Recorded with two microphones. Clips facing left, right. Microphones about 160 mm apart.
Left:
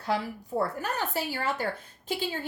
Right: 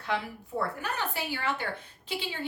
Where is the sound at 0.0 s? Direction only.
40° left (ahead or behind).